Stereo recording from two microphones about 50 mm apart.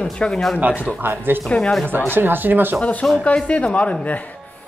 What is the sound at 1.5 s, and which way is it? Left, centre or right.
Speech, left.